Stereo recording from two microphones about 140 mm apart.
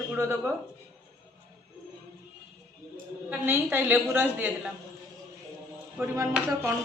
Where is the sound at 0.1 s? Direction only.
15° right (ahead or behind).